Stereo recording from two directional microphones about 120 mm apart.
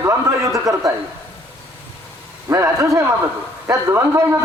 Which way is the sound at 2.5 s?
25° right (ahead or behind).